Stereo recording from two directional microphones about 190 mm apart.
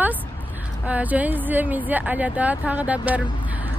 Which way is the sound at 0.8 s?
10° right (ahead or behind).